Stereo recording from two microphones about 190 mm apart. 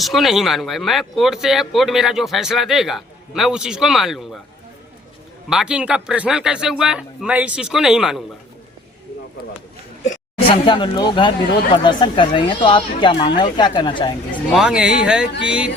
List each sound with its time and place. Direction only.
0.0 s speech: centre (ahead or behind)
5.5 s speech: 5° right (ahead or behind)
10.0 s a sound: 40° left (ahead or behind)
10.5 s speech: 25° left (ahead or behind)
14.5 s speech: 5° right (ahead or behind)